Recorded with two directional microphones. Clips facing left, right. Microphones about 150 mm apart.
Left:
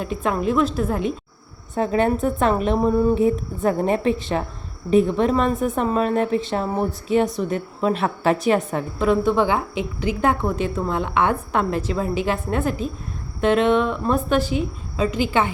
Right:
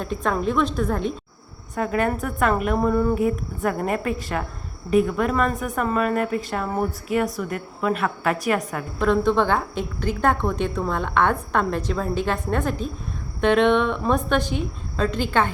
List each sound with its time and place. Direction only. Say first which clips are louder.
0.0 s a woman's voice: left 1 dB; 5° left (ahead or behind)
1.7 s a woman's voice: left 3 dB; 25° left (ahead or behind)
9.0 s a woman's voice: left 1 dB; 10° left (ahead or behind)